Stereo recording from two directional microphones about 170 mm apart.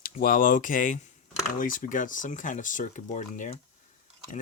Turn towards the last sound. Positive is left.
turn(degrees=45)  # may be behind; listen again after turning